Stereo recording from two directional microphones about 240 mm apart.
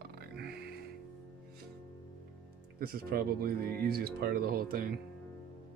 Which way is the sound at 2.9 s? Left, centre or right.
Right.